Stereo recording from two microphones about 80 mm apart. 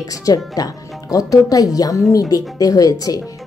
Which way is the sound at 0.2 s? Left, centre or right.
Left.